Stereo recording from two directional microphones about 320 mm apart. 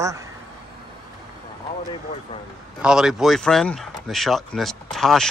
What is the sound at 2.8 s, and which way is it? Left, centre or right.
Speech, centre.